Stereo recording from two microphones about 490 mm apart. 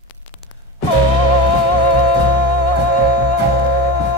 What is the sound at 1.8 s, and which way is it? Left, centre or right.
Music, left.